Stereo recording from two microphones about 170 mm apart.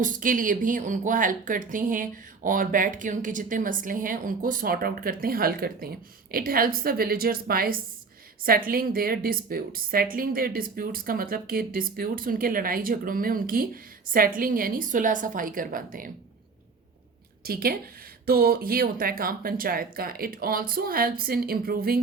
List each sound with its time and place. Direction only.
0.0 s a woman's voice: 50° right (ahead or behind)
17.4 s a woman's voice: 60° right (ahead or behind)